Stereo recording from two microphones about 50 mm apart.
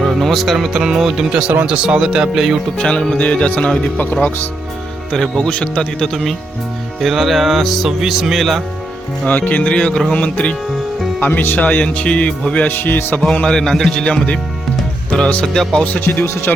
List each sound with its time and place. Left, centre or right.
0.2 s music: centre
0.5 s speech: centre
2.7 s speech: centre; by 4.3 s left
5.4 s speech: centre
7.0 s speech: centre
9.2 s speech: left
9.6 s speech: left
11.2 s speech: left
12.6 s speech: left
13.2 s a man's voice: centre
15.5 s a man's voice: centre
16.0 s speech: left